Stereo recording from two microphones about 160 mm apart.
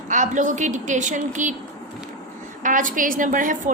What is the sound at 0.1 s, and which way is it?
A woman's voice, 50° right (ahead or behind).